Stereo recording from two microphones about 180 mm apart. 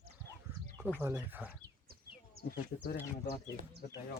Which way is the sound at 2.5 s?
55° left (ahead or behind).